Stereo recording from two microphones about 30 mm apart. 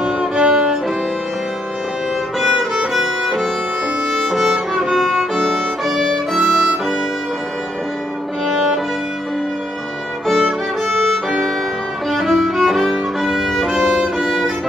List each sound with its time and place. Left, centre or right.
0.0 s music: right
4.1 s violin: centre
4.9 s violin: centre
10.2 s music: centre
12.1 s music: centre
13.2 s violin: centre